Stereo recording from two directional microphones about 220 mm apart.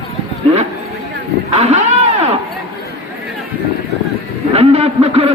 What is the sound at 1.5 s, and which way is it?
Speech, 30° right (ahead or behind).